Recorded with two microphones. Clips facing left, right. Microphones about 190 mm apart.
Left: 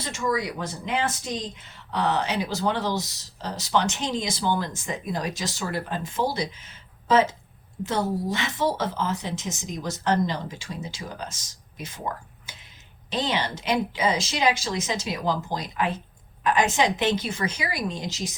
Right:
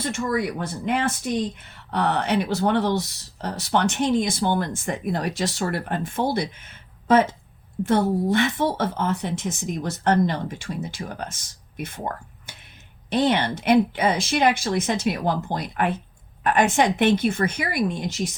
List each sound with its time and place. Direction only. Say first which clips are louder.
0.0 s speech: right 3 dB; 55° right (ahead or behind)
7.9 s speech: right 6 dB; 60° right (ahead or behind)